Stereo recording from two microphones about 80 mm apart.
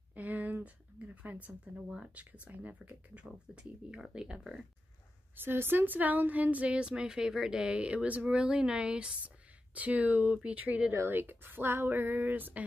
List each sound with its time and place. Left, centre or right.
0.1 s a sound: right
1.9 s speech: centre
5.3 s speech: right
10.9 s speech: right